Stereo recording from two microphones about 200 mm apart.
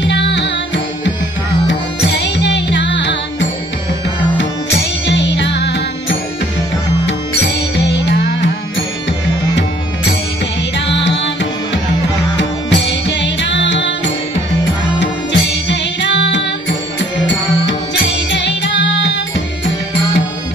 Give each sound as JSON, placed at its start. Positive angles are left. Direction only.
{"t": 0.0, "sound": "music", "side_deg": 60}
{"t": 1.7, "sound": "music", "side_deg": 60}
{"t": 10.9, "sound": "music", "side_deg": 60}
{"t": 12.4, "sound": "music", "side_deg": 60}
{"t": 17.6, "sound": "music", "side_deg": 65}